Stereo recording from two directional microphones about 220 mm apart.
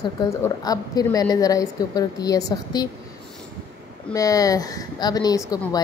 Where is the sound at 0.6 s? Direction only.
15° left (ahead or behind).